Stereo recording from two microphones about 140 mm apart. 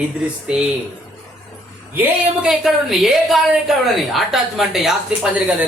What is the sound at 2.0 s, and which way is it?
A woman's voice, 10° right (ahead or behind).